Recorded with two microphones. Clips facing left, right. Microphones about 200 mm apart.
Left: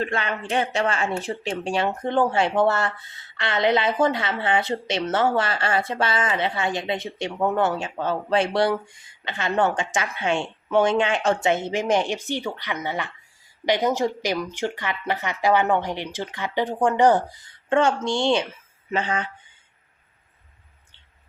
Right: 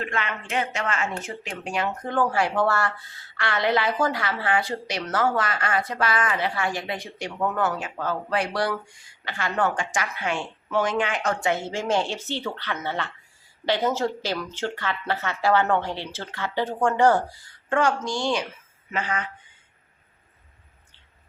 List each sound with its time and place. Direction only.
0.0 s speech: 35° left (ahead or behind)